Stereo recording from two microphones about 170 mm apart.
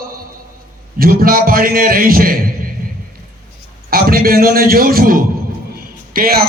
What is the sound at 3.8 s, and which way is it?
Speech, 60° right (ahead or behind).